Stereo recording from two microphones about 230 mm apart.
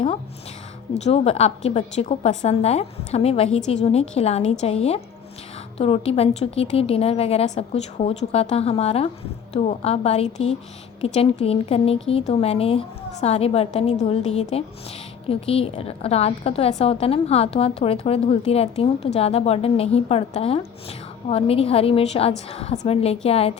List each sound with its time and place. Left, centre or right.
1.0 s a woman's voice: left